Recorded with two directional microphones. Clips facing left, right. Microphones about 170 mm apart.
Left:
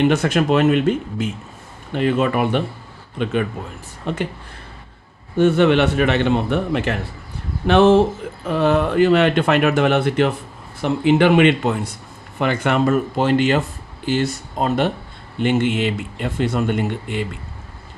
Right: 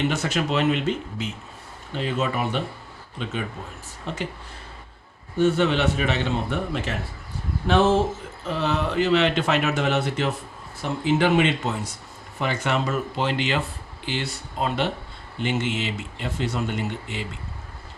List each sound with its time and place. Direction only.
0.0 s speech: 55° left (ahead or behind)
5.4 s speech: 65° left (ahead or behind)